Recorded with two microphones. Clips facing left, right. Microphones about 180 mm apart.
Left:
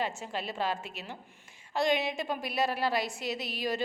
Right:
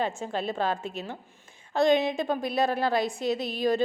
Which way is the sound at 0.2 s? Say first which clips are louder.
Right 5 dB; 50° right (ahead or behind).